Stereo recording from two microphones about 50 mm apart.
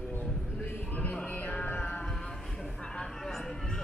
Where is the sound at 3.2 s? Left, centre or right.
Centre.